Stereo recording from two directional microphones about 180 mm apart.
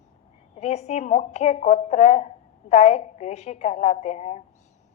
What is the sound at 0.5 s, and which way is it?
A woman's voice, 35° left (ahead or behind).